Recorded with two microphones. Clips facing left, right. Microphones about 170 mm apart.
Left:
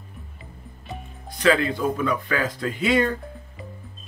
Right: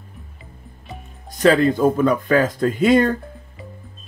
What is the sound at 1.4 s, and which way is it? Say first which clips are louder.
Speech: right 6 dB; 40° right (ahead or behind).